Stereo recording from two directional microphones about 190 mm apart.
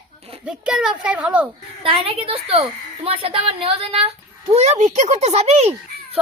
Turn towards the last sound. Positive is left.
turn(degrees=-35)  # may be behind; listen again after turning